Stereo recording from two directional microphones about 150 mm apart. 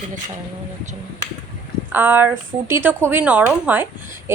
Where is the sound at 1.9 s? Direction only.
15° right (ahead or behind).